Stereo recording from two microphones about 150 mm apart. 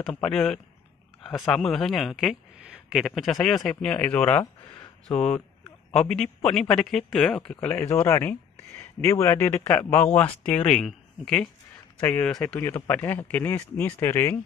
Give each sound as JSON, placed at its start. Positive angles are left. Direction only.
{"t": 0.0, "sound": "speech", "side_deg": 5}
{"t": 7.9, "sound": "speech", "side_deg": 15}